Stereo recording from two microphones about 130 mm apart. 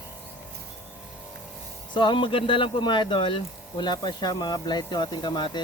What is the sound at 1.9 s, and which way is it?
Speech, 40° left (ahead or behind).